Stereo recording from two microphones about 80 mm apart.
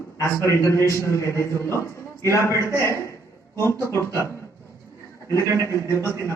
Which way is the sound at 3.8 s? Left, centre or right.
Right.